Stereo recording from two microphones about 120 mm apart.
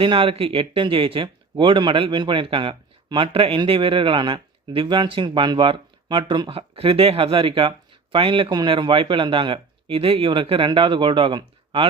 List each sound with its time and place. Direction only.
0.0 s speech: 50° right (ahead or behind)